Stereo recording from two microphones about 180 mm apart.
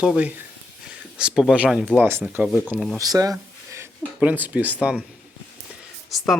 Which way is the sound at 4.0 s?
5° right (ahead or behind).